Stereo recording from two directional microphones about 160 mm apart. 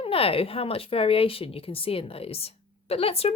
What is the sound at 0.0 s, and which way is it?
Speech, 35° left (ahead or behind).